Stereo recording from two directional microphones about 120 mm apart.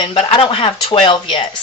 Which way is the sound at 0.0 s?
45° left (ahead or behind).